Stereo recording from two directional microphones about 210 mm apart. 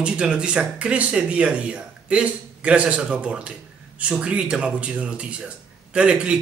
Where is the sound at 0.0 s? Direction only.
5° right (ahead or behind).